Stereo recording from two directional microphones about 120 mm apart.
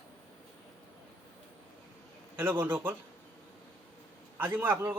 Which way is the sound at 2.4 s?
15° right (ahead or behind).